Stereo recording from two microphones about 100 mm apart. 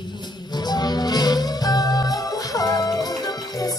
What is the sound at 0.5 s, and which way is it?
Music, 45° left (ahead or behind).